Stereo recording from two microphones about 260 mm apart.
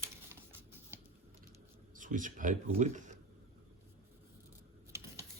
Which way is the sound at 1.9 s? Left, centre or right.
Right.